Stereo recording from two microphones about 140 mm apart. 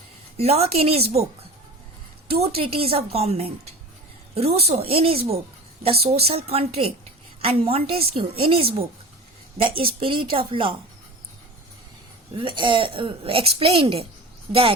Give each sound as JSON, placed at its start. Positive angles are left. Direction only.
{"t": 0.3, "sound": "a woman's voice", "side_deg": -50}
{"t": 12.3, "sound": "a woman's voice", "side_deg": -35}